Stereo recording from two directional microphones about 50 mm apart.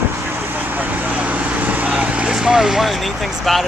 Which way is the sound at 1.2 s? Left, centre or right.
Right.